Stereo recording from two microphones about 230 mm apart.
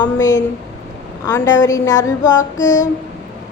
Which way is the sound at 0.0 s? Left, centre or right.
Centre.